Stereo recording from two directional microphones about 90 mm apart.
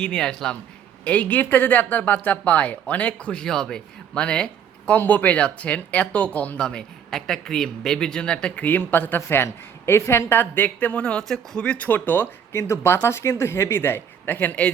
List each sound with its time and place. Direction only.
0.0 s speech: 10° left (ahead or behind)